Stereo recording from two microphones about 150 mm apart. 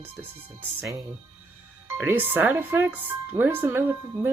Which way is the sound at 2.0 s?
15° right (ahead or behind).